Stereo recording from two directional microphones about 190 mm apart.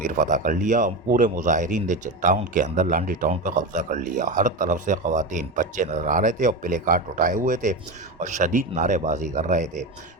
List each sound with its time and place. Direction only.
0.0 s a man's voice: 45° right (ahead or behind)